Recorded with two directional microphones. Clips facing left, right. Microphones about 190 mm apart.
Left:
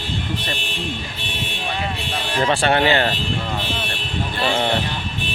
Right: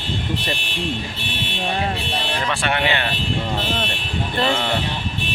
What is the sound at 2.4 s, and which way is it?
Speech, 35° left (ahead or behind).